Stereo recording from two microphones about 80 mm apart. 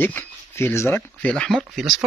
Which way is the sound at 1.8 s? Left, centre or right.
Centre.